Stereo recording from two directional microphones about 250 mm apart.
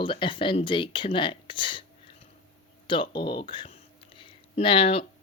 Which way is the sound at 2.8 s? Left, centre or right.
Centre.